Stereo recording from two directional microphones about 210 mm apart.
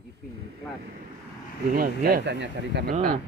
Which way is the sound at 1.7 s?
45° right (ahead or behind).